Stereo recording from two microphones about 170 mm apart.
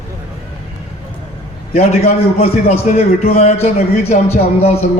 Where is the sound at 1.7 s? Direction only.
35° left (ahead or behind).